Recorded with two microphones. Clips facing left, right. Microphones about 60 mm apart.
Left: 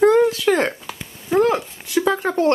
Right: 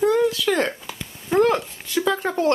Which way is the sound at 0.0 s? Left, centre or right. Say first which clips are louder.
Left 5 dB; left.